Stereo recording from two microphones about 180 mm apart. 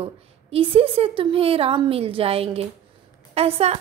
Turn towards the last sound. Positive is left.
turn(degrees=-35)  # may be behind; listen again after turning